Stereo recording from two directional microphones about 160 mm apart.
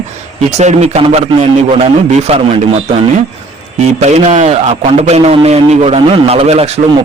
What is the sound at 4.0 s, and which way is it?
A man's voice, 45° right (ahead or behind).